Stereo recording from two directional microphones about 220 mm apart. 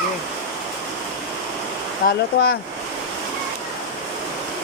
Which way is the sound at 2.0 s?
45° left (ahead or behind).